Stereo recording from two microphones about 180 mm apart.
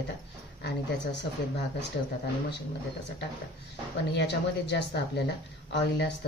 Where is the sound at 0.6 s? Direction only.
75° left (ahead or behind).